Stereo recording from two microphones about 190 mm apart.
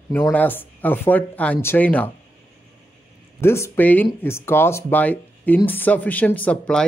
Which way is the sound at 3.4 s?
15° left (ahead or behind).